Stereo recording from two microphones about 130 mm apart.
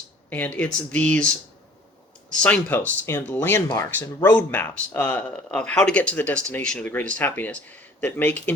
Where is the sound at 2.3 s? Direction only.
10° left (ahead or behind).